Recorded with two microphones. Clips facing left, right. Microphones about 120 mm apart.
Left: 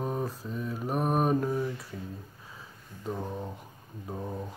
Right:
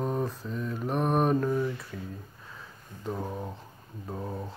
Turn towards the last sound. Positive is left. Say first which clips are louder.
# even
turn(degrees=-5)  # may be behind; listen again after turning